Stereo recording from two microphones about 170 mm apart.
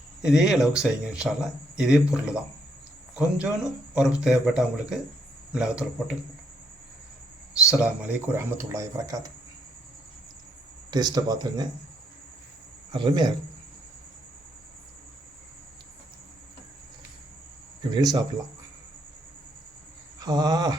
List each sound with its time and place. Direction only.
0.2 s speech: 5° right (ahead or behind)
7.7 s speech: 5° right (ahead or behind)
10.9 s speech: 25° right (ahead or behind)
12.9 s speech: 25° right (ahead or behind)
17.9 s speech: 25° right (ahead or behind)
20.1 s speech: 20° right (ahead or behind)